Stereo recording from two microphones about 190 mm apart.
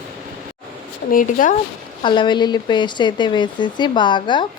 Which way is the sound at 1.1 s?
45° left (ahead or behind).